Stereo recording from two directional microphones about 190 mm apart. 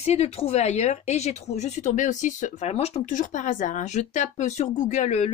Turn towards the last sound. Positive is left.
turn(degrees=35)  # may be behind; listen again after turning